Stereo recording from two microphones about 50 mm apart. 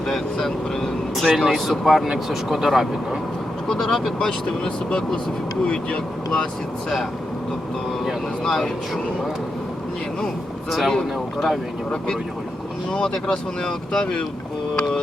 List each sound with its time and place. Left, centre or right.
0.1 s speech: centre
3.7 s speech: centre
8.4 s speech: centre
10.7 s speech: centre
12.9 s speech: centre